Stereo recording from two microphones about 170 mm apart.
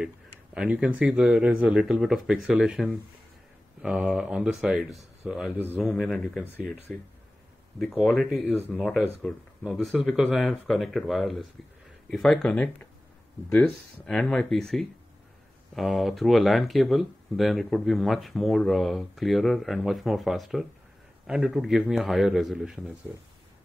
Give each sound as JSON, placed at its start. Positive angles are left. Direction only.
{"t": 0.6, "sound": "speech", "side_deg": -5}